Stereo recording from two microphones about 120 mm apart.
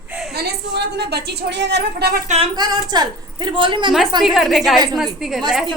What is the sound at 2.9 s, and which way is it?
Speech, 40° right (ahead or behind).